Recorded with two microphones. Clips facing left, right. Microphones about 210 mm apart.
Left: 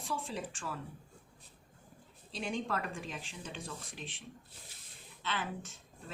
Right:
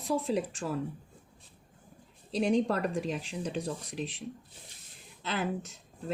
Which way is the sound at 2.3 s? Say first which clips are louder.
Right 10 dB; 40° right (ahead or behind).